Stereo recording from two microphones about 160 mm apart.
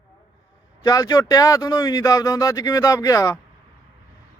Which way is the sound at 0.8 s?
20° left (ahead or behind).